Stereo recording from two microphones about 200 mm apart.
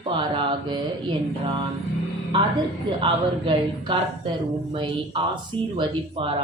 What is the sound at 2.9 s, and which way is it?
Speech, 25° right (ahead or behind).